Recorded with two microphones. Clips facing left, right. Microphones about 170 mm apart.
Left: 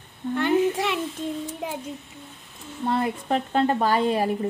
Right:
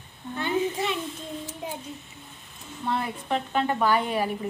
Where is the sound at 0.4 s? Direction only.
75° left (ahead or behind).